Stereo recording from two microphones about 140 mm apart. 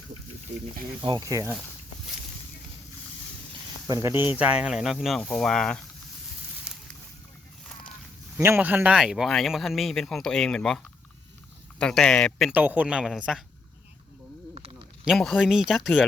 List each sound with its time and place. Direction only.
3.8 s speech: 20° right (ahead or behind); by 5.8 s 5° left (ahead or behind)
8.4 s speech: 15° right (ahead or behind); by 10.8 s 5° left (ahead or behind)
11.8 s speech: 5° left (ahead or behind)
12.5 s speech: 10° right (ahead or behind)
14.5 s a sound: 45° right (ahead or behind)
15.0 s speech: centre (ahead or behind)